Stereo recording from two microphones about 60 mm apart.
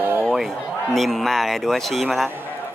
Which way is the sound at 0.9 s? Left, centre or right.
Centre.